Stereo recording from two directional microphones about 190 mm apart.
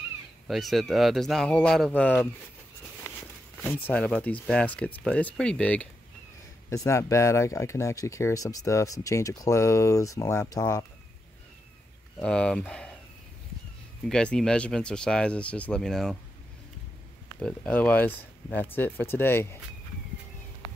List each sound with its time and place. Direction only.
0.5 s speech: centre (ahead or behind)
3.6 s speech: 10° left (ahead or behind)
12.2 s speech: 5° left (ahead or behind)
14.0 s speech: 5° left (ahead or behind)
17.4 s speech: 5° left (ahead or behind)